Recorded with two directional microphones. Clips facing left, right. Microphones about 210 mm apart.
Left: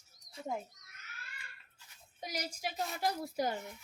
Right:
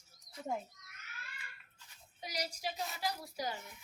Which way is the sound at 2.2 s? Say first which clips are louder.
Left 1 dB; 50° left (ahead or behind).